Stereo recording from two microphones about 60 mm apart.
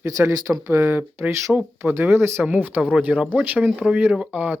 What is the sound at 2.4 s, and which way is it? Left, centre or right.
Speech, right.